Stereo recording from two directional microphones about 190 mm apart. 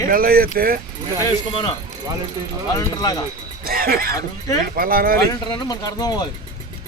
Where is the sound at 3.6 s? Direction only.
50° right (ahead or behind).